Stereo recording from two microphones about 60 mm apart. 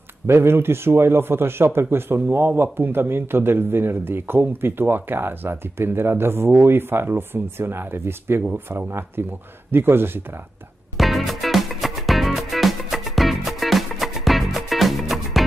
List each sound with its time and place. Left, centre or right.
0.3 s a man's voice: right
11.0 s music: centre